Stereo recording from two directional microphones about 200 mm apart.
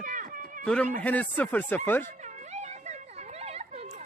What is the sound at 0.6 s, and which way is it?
Speech, 5° left (ahead or behind).